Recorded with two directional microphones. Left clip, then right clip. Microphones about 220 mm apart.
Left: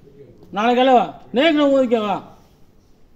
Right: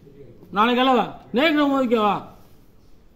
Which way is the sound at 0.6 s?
15° right (ahead or behind).